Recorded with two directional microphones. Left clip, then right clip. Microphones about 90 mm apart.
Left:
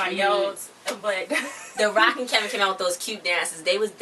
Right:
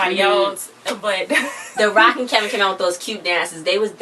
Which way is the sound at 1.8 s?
15° left (ahead or behind).